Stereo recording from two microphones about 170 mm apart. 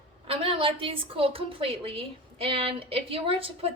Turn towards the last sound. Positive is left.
turn(degrees=-35)  # may be behind; listen again after turning